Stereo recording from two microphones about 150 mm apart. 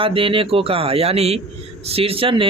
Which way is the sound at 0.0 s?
35° right (ahead or behind).